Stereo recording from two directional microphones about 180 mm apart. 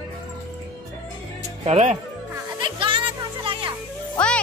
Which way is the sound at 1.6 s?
40° right (ahead or behind).